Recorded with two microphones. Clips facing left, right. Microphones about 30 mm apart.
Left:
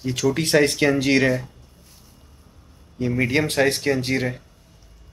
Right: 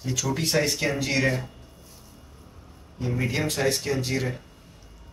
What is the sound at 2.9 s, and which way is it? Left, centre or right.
Speech, left.